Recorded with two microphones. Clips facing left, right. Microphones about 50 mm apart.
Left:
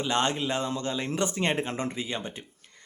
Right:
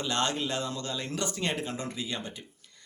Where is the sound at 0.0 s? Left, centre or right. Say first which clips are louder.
Left 3 dB; left.